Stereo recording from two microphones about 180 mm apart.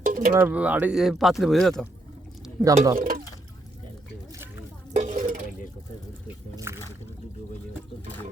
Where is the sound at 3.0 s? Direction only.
50° right (ahead or behind).